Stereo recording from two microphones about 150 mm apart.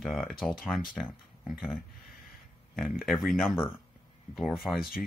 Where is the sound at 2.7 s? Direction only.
Centre (ahead or behind).